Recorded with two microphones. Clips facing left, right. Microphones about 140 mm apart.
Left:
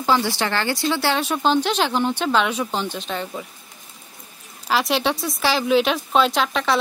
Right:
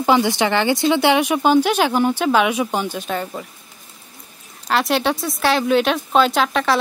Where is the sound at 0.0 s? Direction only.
20° right (ahead or behind).